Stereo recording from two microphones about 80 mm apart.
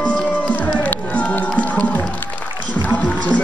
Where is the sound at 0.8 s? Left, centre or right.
Centre.